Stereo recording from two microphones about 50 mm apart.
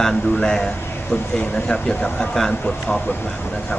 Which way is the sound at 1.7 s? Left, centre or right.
Centre.